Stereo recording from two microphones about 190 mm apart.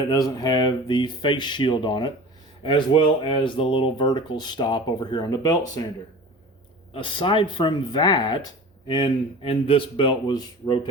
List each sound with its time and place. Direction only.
0.1 s speech: 20° left (ahead or behind)
6.9 s speech: 25° left (ahead or behind)